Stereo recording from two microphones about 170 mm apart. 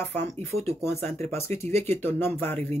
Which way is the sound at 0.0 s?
15° left (ahead or behind).